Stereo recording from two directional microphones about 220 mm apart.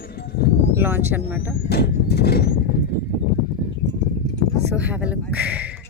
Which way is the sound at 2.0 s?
45° left (ahead or behind).